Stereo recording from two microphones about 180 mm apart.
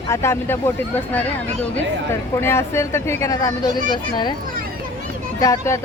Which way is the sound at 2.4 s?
15° left (ahead or behind).